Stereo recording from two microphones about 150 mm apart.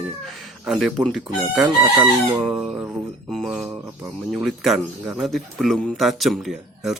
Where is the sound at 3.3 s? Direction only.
Centre (ahead or behind).